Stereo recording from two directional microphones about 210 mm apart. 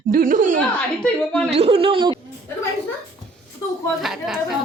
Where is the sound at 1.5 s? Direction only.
30° right (ahead or behind).